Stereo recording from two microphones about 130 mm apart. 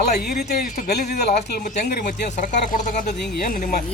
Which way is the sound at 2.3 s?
70° left (ahead or behind).